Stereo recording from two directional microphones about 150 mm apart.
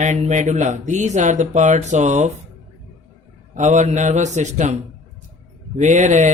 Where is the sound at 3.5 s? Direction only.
55° right (ahead or behind).